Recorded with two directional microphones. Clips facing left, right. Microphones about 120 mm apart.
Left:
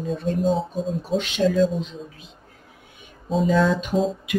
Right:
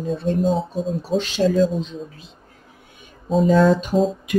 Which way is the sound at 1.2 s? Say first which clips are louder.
Right 2 dB; 35° right (ahead or behind).